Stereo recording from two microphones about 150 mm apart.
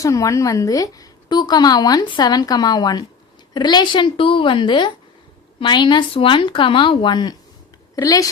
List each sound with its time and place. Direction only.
0.0 s a woman's voice: 20° left (ahead or behind)